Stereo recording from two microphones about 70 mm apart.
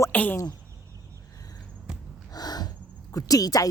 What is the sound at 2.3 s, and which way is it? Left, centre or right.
Snort, left.